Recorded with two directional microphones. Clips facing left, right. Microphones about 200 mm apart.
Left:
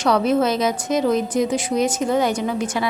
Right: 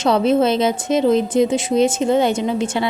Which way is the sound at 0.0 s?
25° right (ahead or behind).